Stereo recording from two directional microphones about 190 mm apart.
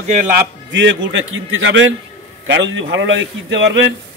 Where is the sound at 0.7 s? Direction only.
75° right (ahead or behind).